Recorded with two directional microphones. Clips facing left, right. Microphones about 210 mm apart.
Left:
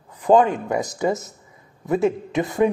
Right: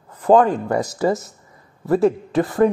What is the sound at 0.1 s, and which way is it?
A man's voice, 10° left (ahead or behind).